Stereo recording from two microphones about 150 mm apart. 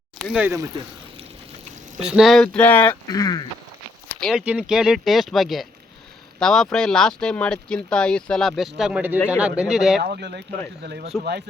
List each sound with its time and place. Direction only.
0.2 s speech: centre (ahead or behind)
0.4 s speech: 20° right (ahead or behind)
2.0 s speech: 5° right (ahead or behind); by 3.0 s 15° left (ahead or behind)
3.1 s speech: 25° left (ahead or behind)
4.1 s speech: centre (ahead or behind)
9.1 s speech: 15° left (ahead or behind)
9.4 s speech: 5° right (ahead or behind)
10.0 s speech: 90° right